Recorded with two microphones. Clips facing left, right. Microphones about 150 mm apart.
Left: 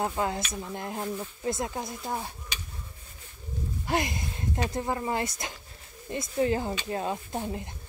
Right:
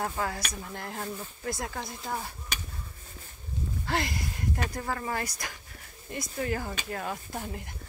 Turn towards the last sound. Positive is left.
turn(degrees=25)  # may be behind; listen again after turning